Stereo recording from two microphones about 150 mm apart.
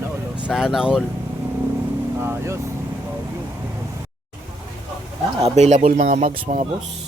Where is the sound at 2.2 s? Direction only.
15° right (ahead or behind).